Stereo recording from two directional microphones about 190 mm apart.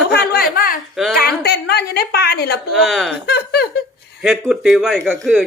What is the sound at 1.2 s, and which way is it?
A woman's voice, 55° left (ahead or behind).